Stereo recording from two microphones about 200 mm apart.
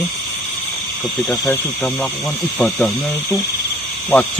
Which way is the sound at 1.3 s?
5° left (ahead or behind).